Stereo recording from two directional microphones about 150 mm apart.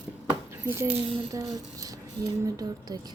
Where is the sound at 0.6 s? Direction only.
15° right (ahead or behind).